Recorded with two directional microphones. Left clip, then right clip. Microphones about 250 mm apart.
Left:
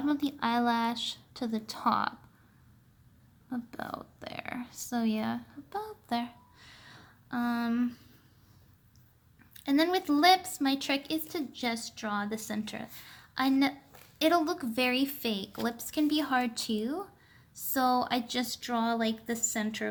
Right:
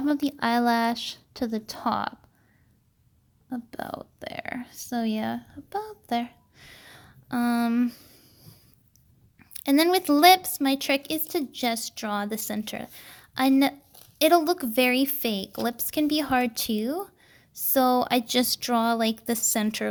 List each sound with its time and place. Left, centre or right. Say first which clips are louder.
0.0 s speech: right 5 dB; right
3.5 s speech: right 4 dB; right
9.4 s a woman's voice: right 6 dB; right